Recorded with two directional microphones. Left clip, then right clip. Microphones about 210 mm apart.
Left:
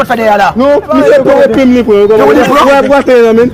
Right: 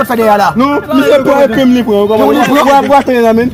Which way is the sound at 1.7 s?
30° right (ahead or behind).